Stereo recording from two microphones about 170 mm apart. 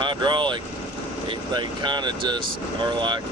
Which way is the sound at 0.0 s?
25° right (ahead or behind).